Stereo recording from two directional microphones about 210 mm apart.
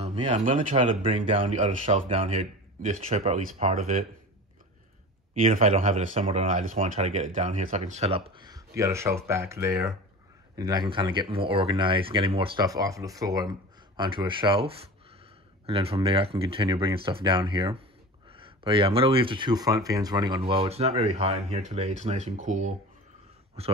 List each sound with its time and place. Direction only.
0.0 s speech: 30° right (ahead or behind)
5.4 s speech: 35° right (ahead or behind)